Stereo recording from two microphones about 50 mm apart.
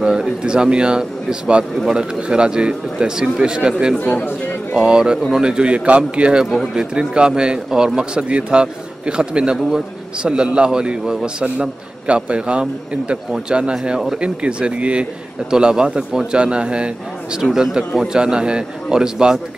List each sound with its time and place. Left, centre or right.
0.0 s speech: centre
4.0 s a man's voice: left
4.7 s speech: centre